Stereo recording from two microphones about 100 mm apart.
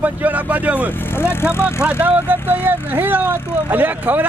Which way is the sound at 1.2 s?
25° left (ahead or behind).